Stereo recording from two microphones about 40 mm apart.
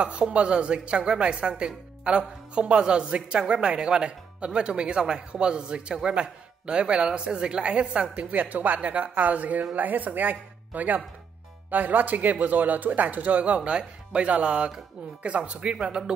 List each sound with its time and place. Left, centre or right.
0.0 s speech: right
8.3 s speech: right
13.7 s speech: right